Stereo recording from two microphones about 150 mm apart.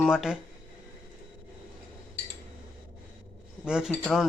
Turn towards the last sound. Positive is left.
turn(degrees=0)  # may be behind; listen again after turning